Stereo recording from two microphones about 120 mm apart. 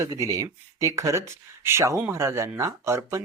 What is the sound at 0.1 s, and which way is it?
Speech, 30° right (ahead or behind).